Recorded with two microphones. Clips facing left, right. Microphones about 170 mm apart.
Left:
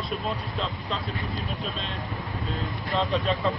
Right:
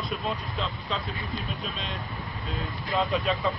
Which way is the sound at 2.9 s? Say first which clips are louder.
Left 1 dB; centre (ahead or behind).